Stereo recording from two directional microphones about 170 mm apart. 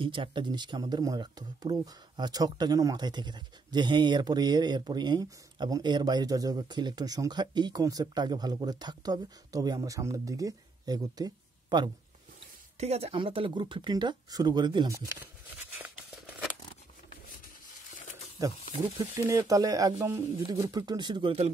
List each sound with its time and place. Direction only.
0.0 s speech: 30° right (ahead or behind)
12.7 s speech: 40° right (ahead or behind); by 15.1 s 20° right (ahead or behind)
15.8 s a sound: 10° right (ahead or behind)
18.4 s speech: 20° right (ahead or behind)